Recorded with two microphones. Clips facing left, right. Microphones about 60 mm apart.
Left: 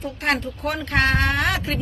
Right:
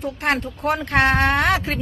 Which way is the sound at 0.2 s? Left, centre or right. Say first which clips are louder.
Even; right.